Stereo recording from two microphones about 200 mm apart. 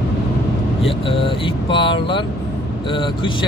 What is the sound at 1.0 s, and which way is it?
Speech, 25° left (ahead or behind).